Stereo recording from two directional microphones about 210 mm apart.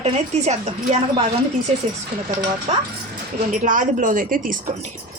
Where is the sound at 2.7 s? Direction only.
30° right (ahead or behind).